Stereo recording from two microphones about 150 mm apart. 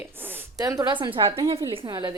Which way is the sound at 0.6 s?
25° right (ahead or behind).